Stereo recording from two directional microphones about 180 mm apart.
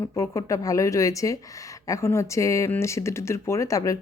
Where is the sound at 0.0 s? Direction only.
15° left (ahead or behind).